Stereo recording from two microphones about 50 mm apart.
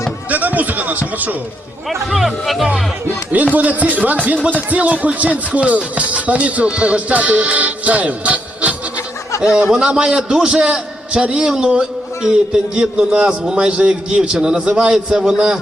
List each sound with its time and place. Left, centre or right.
0.3 s a sound: right
1.9 s speech: centre
3.5 s a man's voice: right; by 15.5 s centre